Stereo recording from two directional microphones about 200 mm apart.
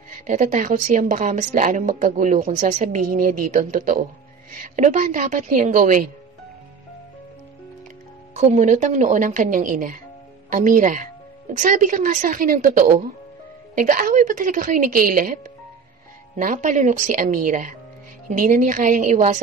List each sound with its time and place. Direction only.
0.3 s speech: 40° right (ahead or behind)
8.4 s speech: 35° right (ahead or behind)
16.3 s speech: 40° right (ahead or behind)